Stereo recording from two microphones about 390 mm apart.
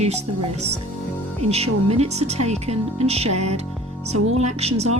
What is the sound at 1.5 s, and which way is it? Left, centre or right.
Speech, centre.